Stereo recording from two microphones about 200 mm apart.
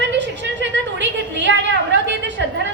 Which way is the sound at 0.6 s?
65° right (ahead or behind).